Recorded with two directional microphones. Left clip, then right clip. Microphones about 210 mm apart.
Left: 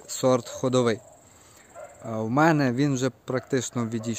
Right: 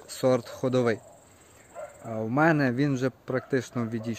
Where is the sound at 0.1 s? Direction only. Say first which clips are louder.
Left 2 dB; 20° left (ahead or behind).